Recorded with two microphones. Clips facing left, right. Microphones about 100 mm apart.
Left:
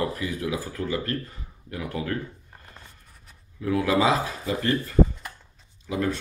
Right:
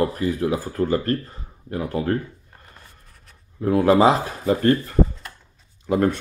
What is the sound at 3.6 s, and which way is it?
Speech, 40° right (ahead or behind).